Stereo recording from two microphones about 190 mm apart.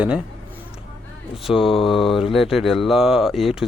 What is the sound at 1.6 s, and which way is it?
Mantra, 25° left (ahead or behind).